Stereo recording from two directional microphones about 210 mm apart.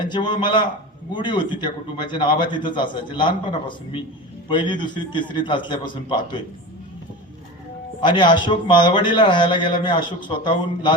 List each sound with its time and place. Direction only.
0.0 s a man's voice: 20° left (ahead or behind)
8.0 s a man's voice: 20° left (ahead or behind)